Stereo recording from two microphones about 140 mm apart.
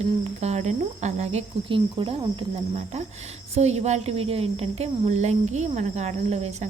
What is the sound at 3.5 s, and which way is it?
A woman's voice, 50° right (ahead or behind).